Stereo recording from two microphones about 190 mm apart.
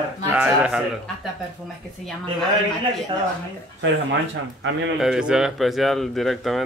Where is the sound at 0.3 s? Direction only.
5° right (ahead or behind).